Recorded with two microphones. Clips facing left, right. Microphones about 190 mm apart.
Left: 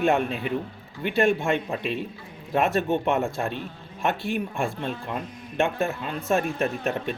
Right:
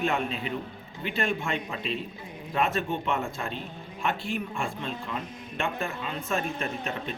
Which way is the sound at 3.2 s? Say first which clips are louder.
Left 6 dB; 50° left (ahead or behind).